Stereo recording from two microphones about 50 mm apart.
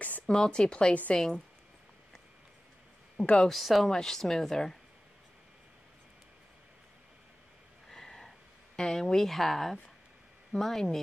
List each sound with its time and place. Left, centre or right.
0.3 s speech: centre
3.4 s speech: centre
7.9 s a sound: centre
8.7 s speech: centre